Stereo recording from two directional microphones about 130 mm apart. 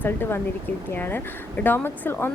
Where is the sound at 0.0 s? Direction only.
15° left (ahead or behind).